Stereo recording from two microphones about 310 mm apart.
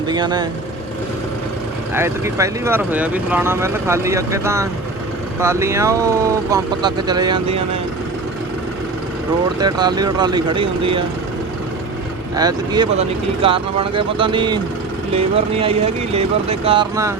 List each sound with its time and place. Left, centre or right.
0.1 s speech: centre
1.9 s speech: centre
9.6 s speech: centre
12.4 s speech: centre